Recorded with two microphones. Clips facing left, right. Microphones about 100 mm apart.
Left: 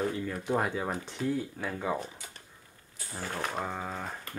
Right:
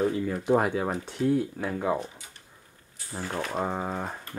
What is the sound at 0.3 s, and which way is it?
Speech, 10° right (ahead or behind).